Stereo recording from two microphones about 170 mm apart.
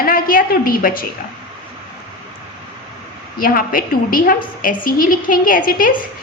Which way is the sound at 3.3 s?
55° left (ahead or behind).